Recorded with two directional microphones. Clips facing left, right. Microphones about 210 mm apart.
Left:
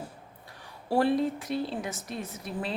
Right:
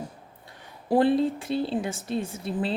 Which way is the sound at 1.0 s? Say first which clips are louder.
Right 4 dB; 30° right (ahead or behind).